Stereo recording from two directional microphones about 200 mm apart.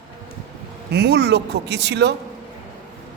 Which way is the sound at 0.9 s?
55° right (ahead or behind).